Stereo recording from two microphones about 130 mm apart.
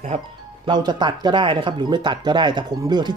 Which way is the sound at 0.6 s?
35° right (ahead or behind).